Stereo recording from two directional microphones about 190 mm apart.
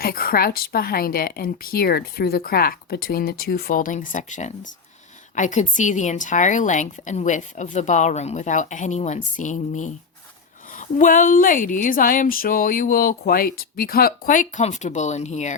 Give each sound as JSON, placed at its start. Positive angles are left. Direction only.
{"t": 0.0, "sound": "a woman's voice", "side_deg": 50}